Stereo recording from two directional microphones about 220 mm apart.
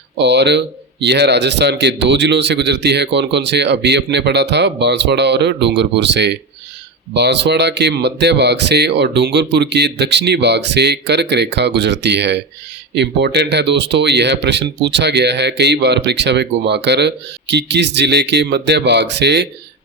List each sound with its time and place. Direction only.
0.2 s speech: 50° right (ahead or behind)